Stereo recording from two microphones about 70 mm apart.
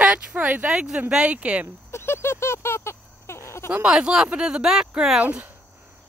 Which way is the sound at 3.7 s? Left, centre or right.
Centre.